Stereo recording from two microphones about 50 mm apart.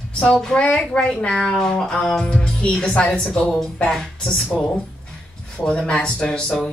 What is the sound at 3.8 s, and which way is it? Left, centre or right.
Speech, centre.